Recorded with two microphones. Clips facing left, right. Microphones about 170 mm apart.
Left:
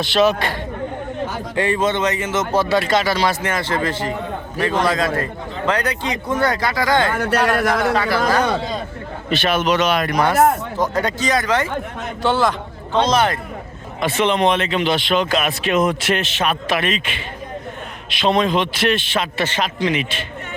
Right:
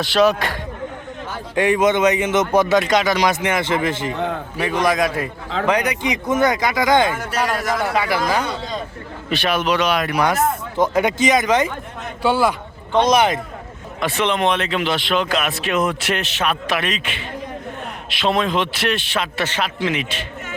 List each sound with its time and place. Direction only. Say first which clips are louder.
1.5 s speech: right 3 dB; 15° right (ahead or behind)
2.8 s speech: right 1 dB; centre (ahead or behind)
3.1 s speech: right 1 dB; 15° right (ahead or behind)
7.1 s a man's voice: left 4 dB; 60° left (ahead or behind)
7.9 s speech: left 2 dB; 15° right (ahead or behind)
10.8 s speech: right 3 dB; 20° right (ahead or behind)
14.0 s speech: left 2 dB; centre (ahead or behind)